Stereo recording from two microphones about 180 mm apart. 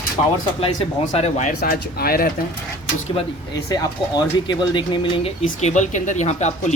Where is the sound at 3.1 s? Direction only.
20° left (ahead or behind).